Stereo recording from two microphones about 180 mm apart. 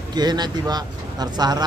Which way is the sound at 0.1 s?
25° right (ahead or behind).